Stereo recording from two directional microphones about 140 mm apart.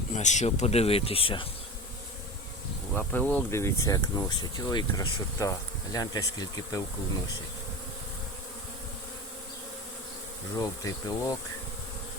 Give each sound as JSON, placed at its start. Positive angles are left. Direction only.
{"t": 0.1, "sound": "speech", "side_deg": 55}
{"t": 2.9, "sound": "speech", "side_deg": 10}
{"t": 10.6, "sound": "speech", "side_deg": 25}